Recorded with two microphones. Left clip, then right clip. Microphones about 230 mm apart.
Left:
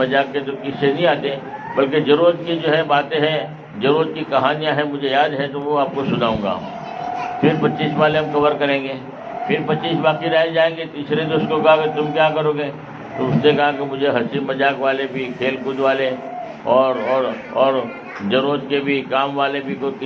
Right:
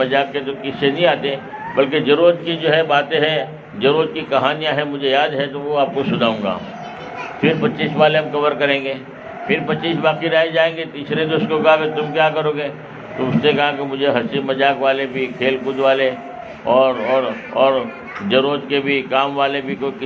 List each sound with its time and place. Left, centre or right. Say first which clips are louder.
0.0 s a man's voice: even; right